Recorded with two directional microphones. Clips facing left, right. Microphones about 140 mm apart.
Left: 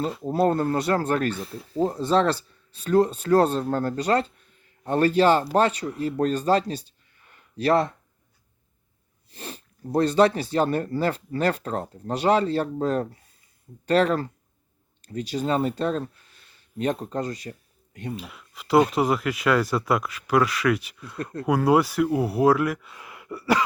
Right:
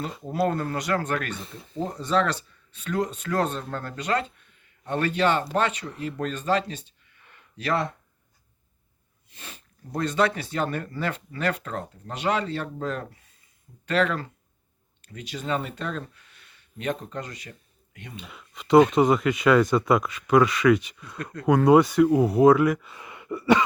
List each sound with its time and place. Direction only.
0.3 s speech: 30° left (ahead or behind)
1.3 s speech: centre (ahead or behind)
1.9 s speech: 30° left (ahead or behind)
9.3 s speech: 35° left (ahead or behind)
18.2 s speech: centre (ahead or behind)